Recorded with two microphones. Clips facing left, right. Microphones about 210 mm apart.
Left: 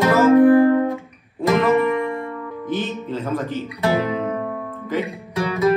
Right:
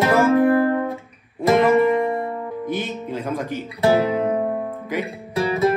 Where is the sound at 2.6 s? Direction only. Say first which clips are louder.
Left 3 dB; 15° right (ahead or behind).